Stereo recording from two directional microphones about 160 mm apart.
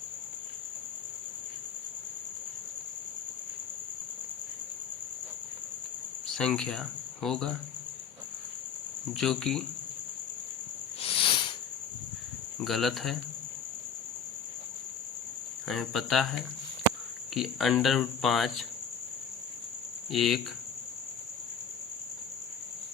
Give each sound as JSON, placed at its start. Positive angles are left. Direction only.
{"t": 6.3, "sound": "speech", "side_deg": 5}
{"t": 9.1, "sound": "cricket", "side_deg": 5}
{"t": 11.0, "sound": "a sound", "side_deg": 35}
{"t": 12.6, "sound": "cricket", "side_deg": 0}
{"t": 15.6, "sound": "cricket", "side_deg": 0}
{"t": 17.3, "sound": "cricket", "side_deg": 0}
{"t": 20.1, "sound": "cricket", "side_deg": 0}